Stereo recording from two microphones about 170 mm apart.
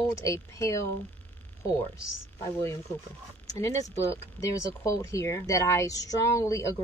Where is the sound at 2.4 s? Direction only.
15° left (ahead or behind).